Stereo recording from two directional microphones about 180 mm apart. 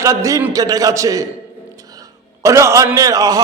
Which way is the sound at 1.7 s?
20° right (ahead or behind).